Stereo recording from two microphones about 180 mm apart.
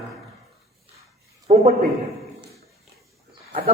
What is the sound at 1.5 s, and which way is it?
Speech, 40° right (ahead or behind).